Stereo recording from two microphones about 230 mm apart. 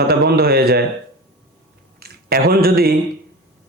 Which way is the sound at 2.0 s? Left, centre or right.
Right.